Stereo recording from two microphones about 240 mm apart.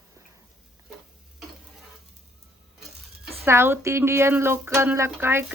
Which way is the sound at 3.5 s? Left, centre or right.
Centre.